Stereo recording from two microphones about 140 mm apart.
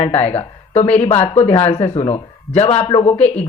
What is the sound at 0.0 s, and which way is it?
Speech, 45° left (ahead or behind).